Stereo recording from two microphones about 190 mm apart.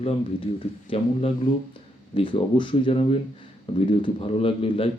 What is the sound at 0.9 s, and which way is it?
Speech, 30° left (ahead or behind).